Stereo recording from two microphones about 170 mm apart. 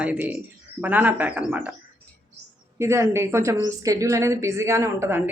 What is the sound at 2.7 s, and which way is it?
A woman's voice, 15° right (ahead or behind).